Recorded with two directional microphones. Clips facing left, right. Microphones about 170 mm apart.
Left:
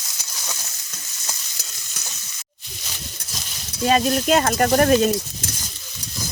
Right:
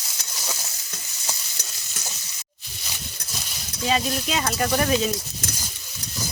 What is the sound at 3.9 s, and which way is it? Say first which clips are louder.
Speech: left 7 dB; 50° left (ahead or behind).